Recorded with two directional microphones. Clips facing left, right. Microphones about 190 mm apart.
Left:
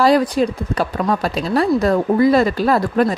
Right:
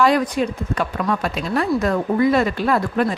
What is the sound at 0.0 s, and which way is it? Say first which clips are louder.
Speech: left 3 dB; 35° left (ahead or behind).